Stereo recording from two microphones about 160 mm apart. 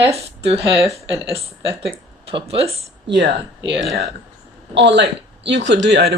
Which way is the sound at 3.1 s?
90° right.